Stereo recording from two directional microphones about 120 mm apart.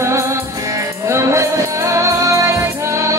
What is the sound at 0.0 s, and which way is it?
Music, 25° right (ahead or behind).